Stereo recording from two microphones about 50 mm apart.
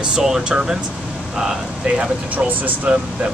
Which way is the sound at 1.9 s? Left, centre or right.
Right.